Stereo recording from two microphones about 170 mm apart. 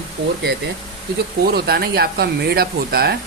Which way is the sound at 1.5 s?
65° right (ahead or behind).